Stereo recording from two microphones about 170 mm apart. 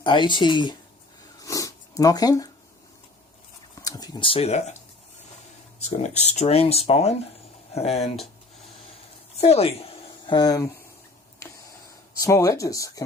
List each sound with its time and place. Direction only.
0.0 s speech: 30° left (ahead or behind)
1.4 s dog: 20° left (ahead or behind)
3.8 s a sound: 20° left (ahead or behind); by 4.7 s 40° left (ahead or behind)
6.0 s speech: 40° left (ahead or behind)
9.4 s a woman's voice: 35° left (ahead or behind); by 10.8 s 20° left (ahead or behind)
12.2 s speech: 20° left (ahead or behind)